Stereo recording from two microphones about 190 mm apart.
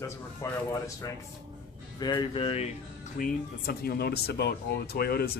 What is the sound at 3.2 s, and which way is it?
Speech, 50° left (ahead or behind).